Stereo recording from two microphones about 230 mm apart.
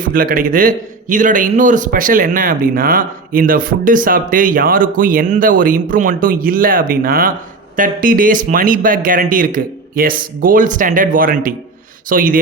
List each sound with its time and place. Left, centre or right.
0.0 s a man's voice: right